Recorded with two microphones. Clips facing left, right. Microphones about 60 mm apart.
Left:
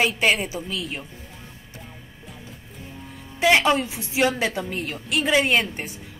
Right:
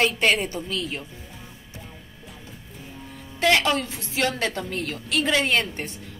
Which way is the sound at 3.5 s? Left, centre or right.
Centre.